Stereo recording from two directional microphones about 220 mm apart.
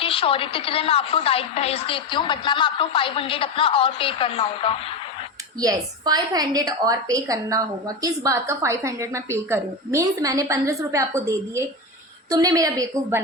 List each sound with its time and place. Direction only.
0.0 s a woman's voice: 25° left (ahead or behind)
5.5 s a woman's voice: 15° right (ahead or behind)